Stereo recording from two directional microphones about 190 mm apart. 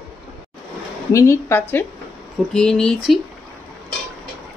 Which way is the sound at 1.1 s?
15° left (ahead or behind).